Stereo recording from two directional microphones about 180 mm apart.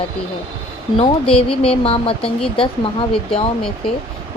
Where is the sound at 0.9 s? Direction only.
30° left (ahead or behind).